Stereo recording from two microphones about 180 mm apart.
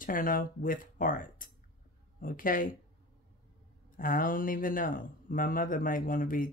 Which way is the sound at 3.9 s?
50° left (ahead or behind).